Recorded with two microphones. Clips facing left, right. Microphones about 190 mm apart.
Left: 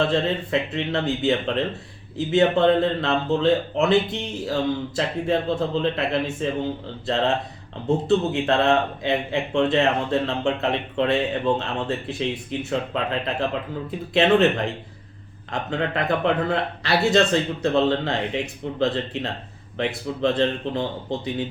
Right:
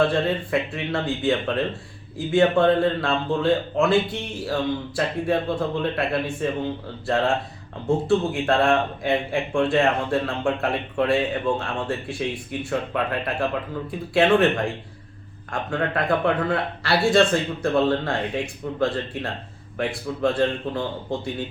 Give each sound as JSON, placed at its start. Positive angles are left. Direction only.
{"t": 0.0, "sound": "speech", "side_deg": 20}
{"t": 7.9, "sound": "speech", "side_deg": 20}
{"t": 15.7, "sound": "speech", "side_deg": 20}